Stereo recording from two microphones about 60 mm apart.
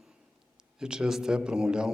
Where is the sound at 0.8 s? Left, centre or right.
Centre.